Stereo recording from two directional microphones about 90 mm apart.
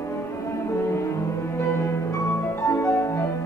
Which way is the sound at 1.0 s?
30° left (ahead or behind).